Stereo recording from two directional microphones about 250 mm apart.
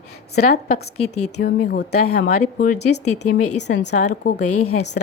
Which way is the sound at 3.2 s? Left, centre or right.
Left.